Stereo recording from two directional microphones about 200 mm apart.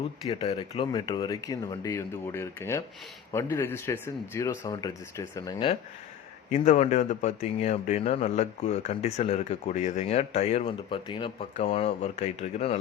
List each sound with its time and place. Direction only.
0.3 s speech: 30° left (ahead or behind)
6.5 s a man's voice: 35° left (ahead or behind)